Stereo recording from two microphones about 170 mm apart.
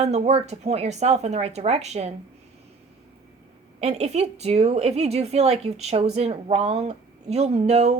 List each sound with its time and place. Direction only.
0.0 s a woman's voice: 35° right (ahead or behind)
3.8 s a woman's voice: 40° right (ahead or behind)